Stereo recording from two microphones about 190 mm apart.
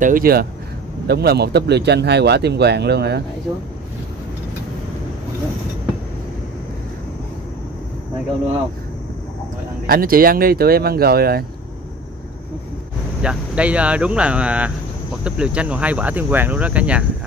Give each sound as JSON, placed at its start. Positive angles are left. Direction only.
{"t": 0.0, "sound": "speech", "side_deg": -50}
{"t": 9.8, "sound": "speech", "side_deg": -50}
{"t": 13.2, "sound": "speech", "side_deg": -5}